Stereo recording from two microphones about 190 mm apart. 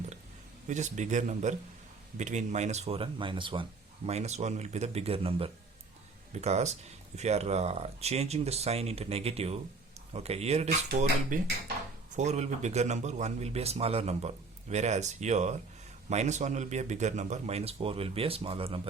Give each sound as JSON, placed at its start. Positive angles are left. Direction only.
{"t": 0.7, "sound": "speech", "side_deg": -40}